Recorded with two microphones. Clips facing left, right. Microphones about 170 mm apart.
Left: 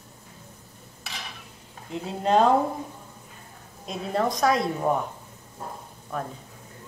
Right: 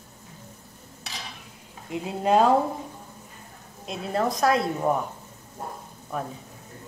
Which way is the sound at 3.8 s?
Centre (ahead or behind).